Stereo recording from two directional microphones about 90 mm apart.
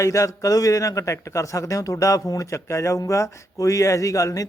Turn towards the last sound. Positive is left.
turn(degrees=40)  # may be behind; listen again after turning